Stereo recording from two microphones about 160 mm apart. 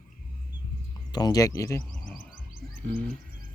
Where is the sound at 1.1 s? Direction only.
25° left (ahead or behind).